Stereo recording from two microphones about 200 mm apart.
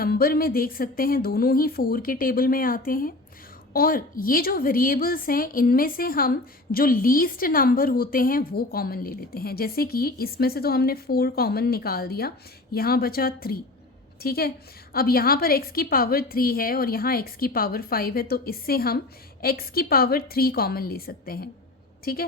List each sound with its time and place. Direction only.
0.0 s a woman's voice: 50° left (ahead or behind)